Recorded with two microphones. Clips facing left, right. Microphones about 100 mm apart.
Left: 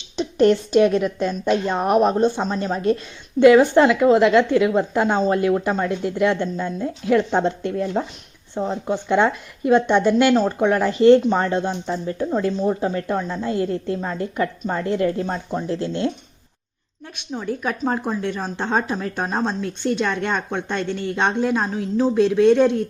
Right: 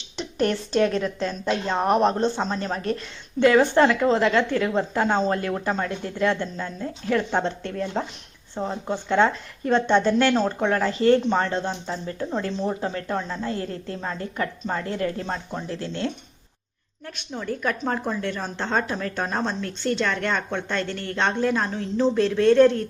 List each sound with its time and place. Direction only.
0.2 s speech: 20° left (ahead or behind)
10.7 s speech: 20° left (ahead or behind)
17.2 s speech: 15° left (ahead or behind)